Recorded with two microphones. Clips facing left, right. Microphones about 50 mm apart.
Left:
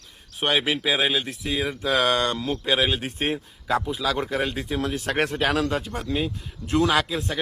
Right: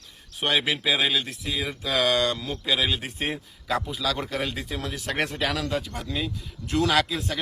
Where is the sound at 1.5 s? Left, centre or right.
Left.